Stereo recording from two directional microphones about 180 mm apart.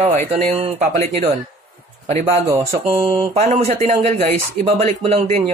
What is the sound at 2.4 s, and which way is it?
Speech, 15° right (ahead or behind).